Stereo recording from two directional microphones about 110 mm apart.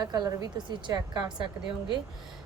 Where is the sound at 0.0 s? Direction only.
40° right (ahead or behind).